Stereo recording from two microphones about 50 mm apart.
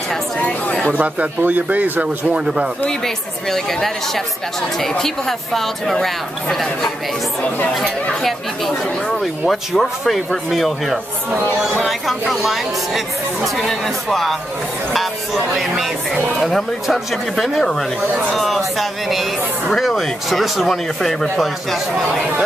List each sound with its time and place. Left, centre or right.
0.4 s chatter: left
0.9 s speech: right
2.2 s speech: centre
3.4 s speech: centre
8.2 s speech: centre